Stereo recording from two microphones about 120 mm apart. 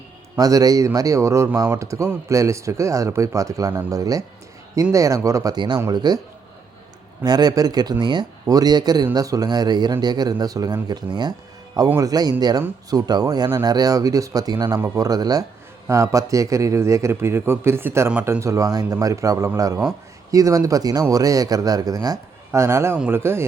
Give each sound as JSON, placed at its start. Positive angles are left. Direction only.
{"t": 0.3, "sound": "speech", "side_deg": -30}
{"t": 7.2, "sound": "speech", "side_deg": -35}